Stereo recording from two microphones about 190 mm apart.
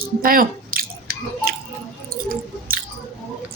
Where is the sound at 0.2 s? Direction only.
50° right (ahead or behind).